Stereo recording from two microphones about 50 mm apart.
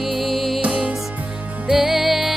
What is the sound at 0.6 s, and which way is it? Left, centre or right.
Music, right.